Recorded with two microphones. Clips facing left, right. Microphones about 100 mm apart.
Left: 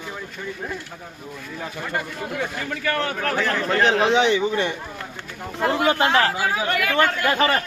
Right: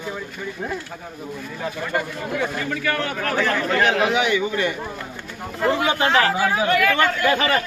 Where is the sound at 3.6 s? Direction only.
30° left (ahead or behind).